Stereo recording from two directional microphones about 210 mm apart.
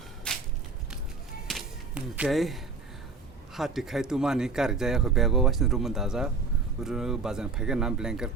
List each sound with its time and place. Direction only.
0.3 s a sound: 5° left (ahead or behind)
1.5 s whip: 5° right (ahead or behind)
3.5 s speech: centre (ahead or behind)